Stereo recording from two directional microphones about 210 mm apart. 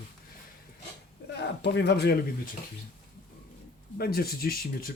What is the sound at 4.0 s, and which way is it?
Speech, 45° left (ahead or behind).